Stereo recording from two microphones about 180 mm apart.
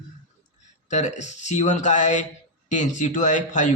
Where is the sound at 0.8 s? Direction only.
40° left (ahead or behind).